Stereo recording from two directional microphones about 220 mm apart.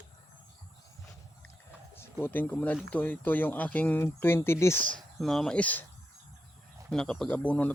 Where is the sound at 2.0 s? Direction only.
10° left (ahead or behind).